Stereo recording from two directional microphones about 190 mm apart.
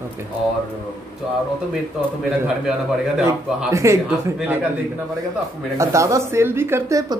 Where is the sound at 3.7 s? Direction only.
15° right (ahead or behind).